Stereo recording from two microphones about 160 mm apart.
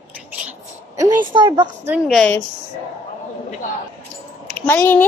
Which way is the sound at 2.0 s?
5° left (ahead or behind).